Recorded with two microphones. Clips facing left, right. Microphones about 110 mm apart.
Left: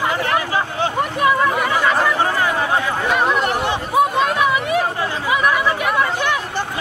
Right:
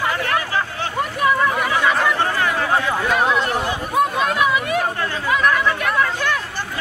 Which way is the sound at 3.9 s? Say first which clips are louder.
Left 2 dB; centre (ahead or behind).